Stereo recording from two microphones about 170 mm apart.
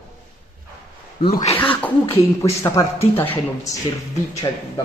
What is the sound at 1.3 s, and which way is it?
Speech, 45° left (ahead or behind).